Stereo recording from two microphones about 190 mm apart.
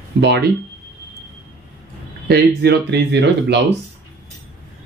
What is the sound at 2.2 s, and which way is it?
Speech, 60° right (ahead or behind).